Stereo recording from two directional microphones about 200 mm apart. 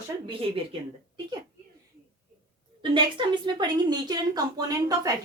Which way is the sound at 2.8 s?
25° right (ahead or behind).